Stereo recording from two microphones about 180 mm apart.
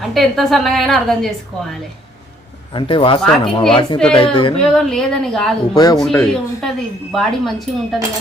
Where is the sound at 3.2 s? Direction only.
5° left (ahead or behind).